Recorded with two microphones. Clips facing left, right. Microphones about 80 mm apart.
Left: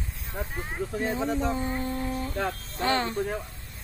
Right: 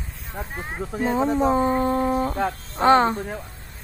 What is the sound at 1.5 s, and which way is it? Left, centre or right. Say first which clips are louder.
A woman's voice: right 10 dB; right.